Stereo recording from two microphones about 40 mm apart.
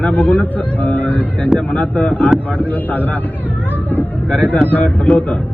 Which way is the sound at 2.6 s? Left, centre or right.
Left.